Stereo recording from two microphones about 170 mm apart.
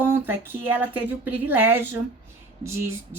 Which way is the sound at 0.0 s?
10° right (ahead or behind).